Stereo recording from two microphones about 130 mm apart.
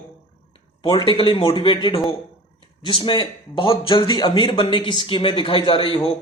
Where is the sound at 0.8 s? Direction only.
35° left (ahead or behind).